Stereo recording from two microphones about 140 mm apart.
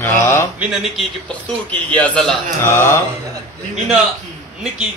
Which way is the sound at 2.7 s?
20° left (ahead or behind).